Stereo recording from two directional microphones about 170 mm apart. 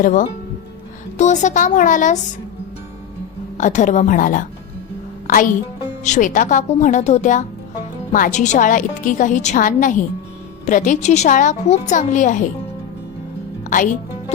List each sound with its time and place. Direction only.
0.0 s a woman's voice: 50° left (ahead or behind)
3.6 s a woman's voice: 45° left (ahead or behind)
6.0 s a woman's voice: 45° left (ahead or behind)
13.7 s speech: 50° left (ahead or behind)